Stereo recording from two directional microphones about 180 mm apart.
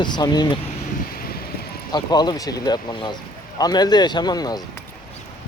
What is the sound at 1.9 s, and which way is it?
Speech, 25° left (ahead or behind).